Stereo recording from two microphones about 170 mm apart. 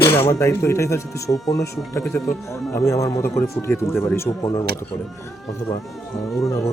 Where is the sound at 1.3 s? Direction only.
30° left (ahead or behind).